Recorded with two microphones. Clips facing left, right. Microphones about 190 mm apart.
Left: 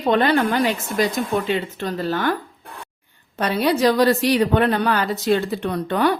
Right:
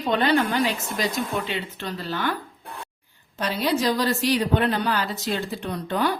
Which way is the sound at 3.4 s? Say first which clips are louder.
Left 5 dB; 60° left (ahead or behind).